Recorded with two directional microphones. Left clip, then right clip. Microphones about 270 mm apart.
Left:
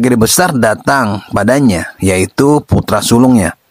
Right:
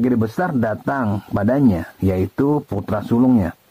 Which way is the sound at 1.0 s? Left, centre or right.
Left.